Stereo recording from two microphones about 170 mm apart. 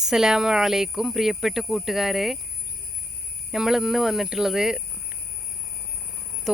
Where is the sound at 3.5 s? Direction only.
Centre (ahead or behind).